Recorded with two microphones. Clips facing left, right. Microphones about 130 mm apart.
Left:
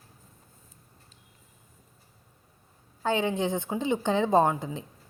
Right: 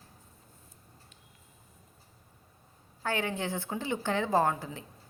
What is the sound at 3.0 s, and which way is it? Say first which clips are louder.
A woman's voice: left 6 dB; 20° left (ahead or behind).